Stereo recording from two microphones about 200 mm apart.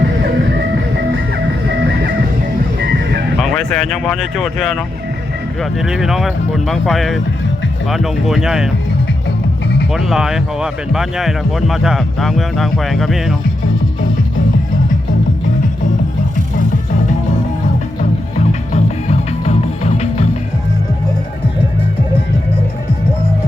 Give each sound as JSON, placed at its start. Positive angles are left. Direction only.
{"t": 3.4, "sound": "speech", "side_deg": 5}
{"t": 5.8, "sound": "speech", "side_deg": 0}
{"t": 9.9, "sound": "speech", "side_deg": 0}
{"t": 18.7, "sound": "music", "side_deg": 35}